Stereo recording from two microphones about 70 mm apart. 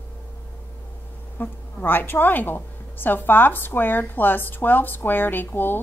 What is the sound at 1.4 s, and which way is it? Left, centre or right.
A woman's voice, left.